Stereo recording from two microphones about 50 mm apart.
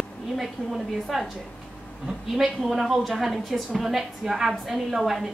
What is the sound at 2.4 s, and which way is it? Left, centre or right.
A woman's voice, centre.